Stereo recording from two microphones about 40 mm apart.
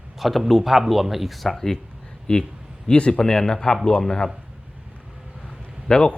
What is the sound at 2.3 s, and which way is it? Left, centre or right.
Speech, left.